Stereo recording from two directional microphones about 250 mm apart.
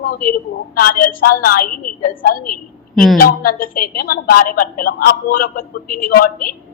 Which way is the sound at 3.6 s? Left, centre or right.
Left.